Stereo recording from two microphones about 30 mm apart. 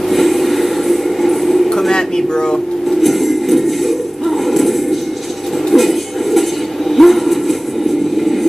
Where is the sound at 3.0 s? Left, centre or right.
Centre.